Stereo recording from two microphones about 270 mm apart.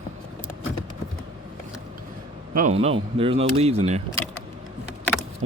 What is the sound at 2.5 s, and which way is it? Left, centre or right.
Speech, right.